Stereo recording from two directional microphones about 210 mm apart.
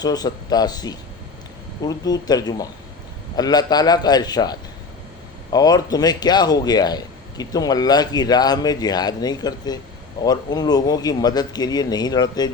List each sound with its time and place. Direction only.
0.0 s a man's voice: 20° left (ahead or behind)